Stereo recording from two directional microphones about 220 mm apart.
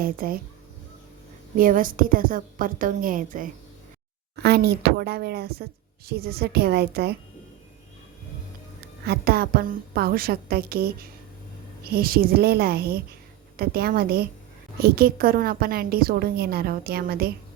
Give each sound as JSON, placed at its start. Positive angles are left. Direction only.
{"t": 0.0, "sound": "a woman's voice", "side_deg": -40}
{"t": 1.5, "sound": "a woman's voice", "side_deg": -40}
{"t": 9.0, "sound": "a woman's voice", "side_deg": -45}